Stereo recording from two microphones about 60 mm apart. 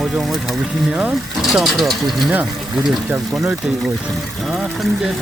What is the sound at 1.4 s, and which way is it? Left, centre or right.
Speech, centre.